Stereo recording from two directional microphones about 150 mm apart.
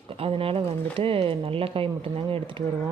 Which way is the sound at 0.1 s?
40° right (ahead or behind).